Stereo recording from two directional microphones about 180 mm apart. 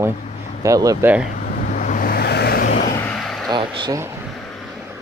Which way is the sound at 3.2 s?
Centre (ahead or behind).